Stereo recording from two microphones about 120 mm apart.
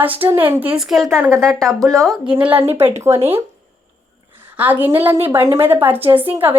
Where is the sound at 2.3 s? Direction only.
15° right (ahead or behind).